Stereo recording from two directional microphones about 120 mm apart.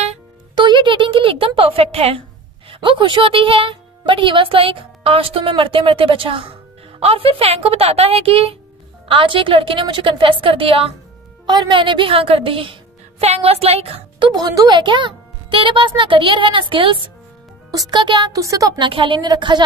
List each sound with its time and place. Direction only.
0.6 s a sound: 40° right (ahead or behind); by 2.2 s 55° right (ahead or behind)
2.7 s speech: 45° right (ahead or behind)
11.4 s a woman's voice: 35° right (ahead or behind); by 14.0 s 55° right (ahead or behind)
14.2 s a woman's voice: 35° right (ahead or behind)
18.3 s speech: 30° right (ahead or behind)
18.8 s a woman's voice: 45° right (ahead or behind)